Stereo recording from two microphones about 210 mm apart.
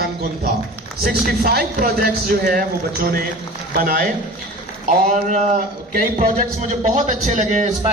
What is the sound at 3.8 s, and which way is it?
Speech, 45° right (ahead or behind).